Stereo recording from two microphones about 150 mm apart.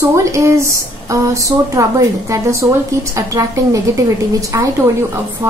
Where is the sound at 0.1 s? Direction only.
20° right (ahead or behind).